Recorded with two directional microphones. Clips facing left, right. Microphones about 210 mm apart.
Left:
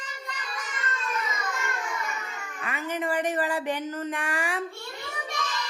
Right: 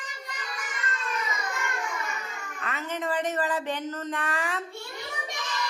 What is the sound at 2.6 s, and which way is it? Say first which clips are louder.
Speech: left 2 dB; 10° left (ahead or behind).